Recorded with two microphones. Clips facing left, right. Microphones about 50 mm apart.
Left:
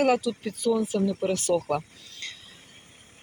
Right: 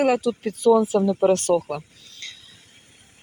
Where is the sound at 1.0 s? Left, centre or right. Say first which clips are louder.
Right 7 dB; right.